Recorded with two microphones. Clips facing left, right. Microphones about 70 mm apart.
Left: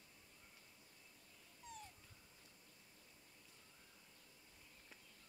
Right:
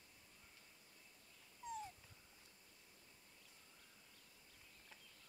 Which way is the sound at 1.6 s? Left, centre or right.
Right.